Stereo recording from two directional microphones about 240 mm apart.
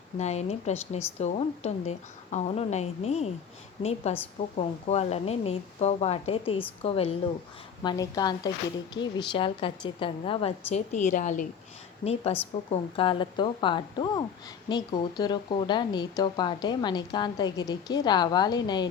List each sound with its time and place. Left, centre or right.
0.2 s a woman's voice: left